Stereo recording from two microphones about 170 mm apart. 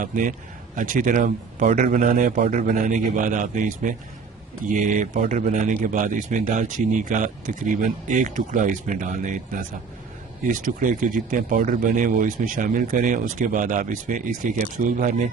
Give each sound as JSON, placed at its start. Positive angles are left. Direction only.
{"t": 0.0, "sound": "a man's voice", "side_deg": -50}